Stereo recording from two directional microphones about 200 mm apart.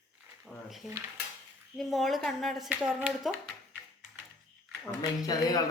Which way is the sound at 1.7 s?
Centre (ahead or behind).